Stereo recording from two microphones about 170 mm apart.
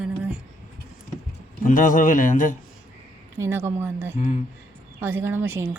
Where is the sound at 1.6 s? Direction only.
50° left (ahead or behind).